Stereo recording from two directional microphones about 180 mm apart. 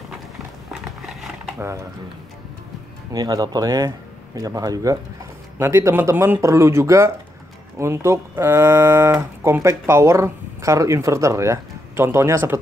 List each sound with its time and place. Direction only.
3.1 s speech: 20° right (ahead or behind)